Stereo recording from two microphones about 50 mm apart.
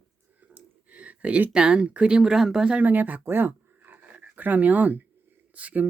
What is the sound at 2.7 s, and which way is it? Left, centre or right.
Speech, right.